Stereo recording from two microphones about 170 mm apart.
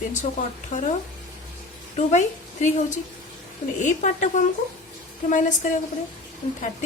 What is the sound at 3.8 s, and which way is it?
A woman's voice, 45° left (ahead or behind).